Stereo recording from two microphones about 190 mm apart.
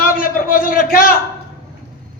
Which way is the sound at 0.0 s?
45° left (ahead or behind).